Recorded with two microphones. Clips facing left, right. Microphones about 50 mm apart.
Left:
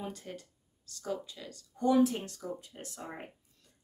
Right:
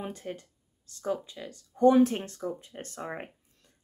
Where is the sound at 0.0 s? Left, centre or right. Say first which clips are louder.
Right 4 dB; right.